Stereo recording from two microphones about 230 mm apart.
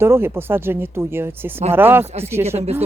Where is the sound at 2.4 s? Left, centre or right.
Right.